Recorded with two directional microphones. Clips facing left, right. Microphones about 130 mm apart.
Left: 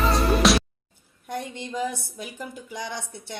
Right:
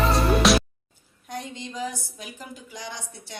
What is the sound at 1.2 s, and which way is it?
A woman's voice, 55° left (ahead or behind).